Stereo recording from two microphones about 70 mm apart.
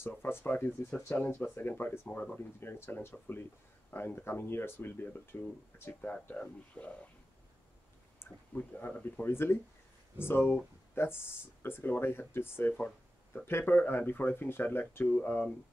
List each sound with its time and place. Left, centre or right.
0.2 s speech: left
2.6 s speech: left; by 7.1 s centre
8.2 s speech: left
12.7 s a sound: centre
13.5 s speech: left